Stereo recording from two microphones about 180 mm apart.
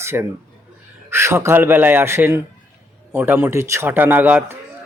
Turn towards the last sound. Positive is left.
turn(degrees=-10)  # may be behind; listen again after turning